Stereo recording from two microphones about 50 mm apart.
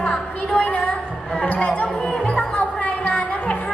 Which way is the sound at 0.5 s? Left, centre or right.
Left.